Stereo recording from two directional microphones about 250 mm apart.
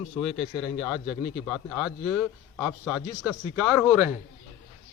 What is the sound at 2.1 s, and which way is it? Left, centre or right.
Speech, centre.